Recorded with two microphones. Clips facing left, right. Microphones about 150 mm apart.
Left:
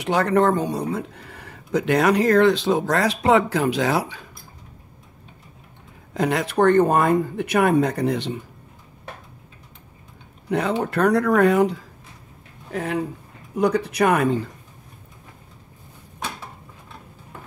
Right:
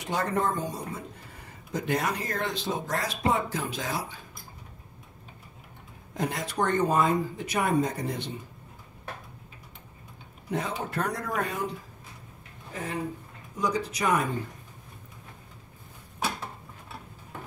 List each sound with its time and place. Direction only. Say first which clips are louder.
0.0 s speech: left 9 dB; 75° left (ahead or behind)
6.1 s speech: left 9 dB; 80° left
10.5 s speech: left 9 dB; 75° left (ahead or behind)
12.7 s speech: left 8 dB; 65° left (ahead or behind)